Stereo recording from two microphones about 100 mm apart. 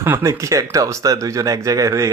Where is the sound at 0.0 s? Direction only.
25° right (ahead or behind).